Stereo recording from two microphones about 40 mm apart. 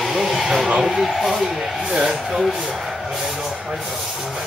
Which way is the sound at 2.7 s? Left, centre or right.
Centre.